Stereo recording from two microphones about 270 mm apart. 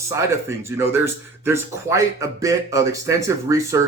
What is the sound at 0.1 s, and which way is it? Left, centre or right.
Speech, centre.